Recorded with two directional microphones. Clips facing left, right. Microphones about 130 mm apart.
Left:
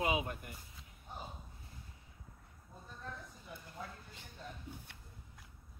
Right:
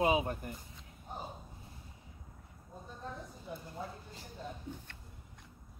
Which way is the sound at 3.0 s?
25° right (ahead or behind).